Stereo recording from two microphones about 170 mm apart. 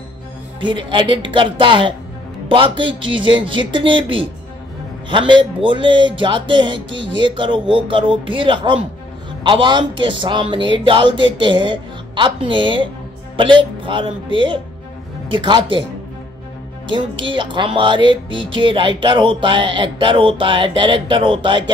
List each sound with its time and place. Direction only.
0.6 s speech: 30° right (ahead or behind)
6.9 s speech: 90° right
7.2 s speech: 30° right (ahead or behind)
16.9 s speech: 30° right (ahead or behind)